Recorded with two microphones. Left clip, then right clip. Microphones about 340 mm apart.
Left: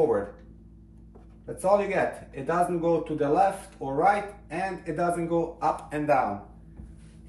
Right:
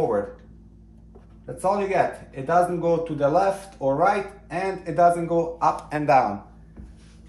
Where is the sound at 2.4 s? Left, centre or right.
Centre.